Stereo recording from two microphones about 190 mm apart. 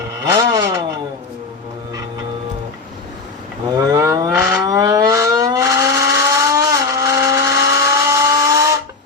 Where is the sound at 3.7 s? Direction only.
20° right (ahead or behind).